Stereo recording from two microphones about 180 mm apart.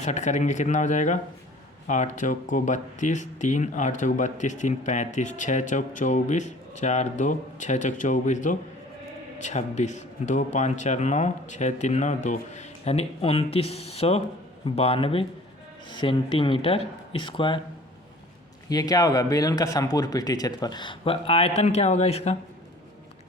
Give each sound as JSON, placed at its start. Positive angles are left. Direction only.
{"t": 0.0, "sound": "a man's voice", "side_deg": 40}
{"t": 18.7, "sound": "speech", "side_deg": 20}